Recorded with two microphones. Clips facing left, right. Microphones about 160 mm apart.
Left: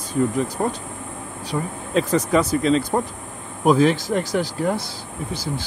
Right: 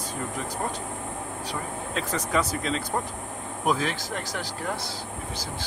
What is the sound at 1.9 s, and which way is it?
Speech, 20° left (ahead or behind).